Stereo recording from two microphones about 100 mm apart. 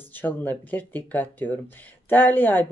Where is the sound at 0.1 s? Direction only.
15° left (ahead or behind).